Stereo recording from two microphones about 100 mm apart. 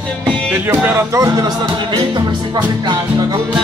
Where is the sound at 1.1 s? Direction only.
40° right (ahead or behind).